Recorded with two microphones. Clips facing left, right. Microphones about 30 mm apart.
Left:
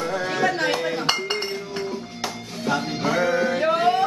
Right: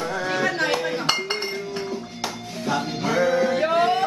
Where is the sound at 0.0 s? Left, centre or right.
Centre.